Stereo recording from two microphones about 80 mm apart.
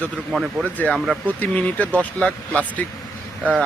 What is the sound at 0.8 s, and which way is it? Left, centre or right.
Speech, left.